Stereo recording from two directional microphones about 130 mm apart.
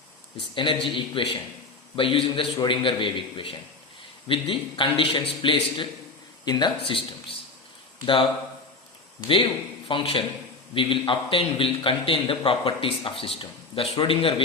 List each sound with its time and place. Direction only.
0.5 s a man's voice: 40° left (ahead or behind)
9.2 s a man's voice: 40° left (ahead or behind)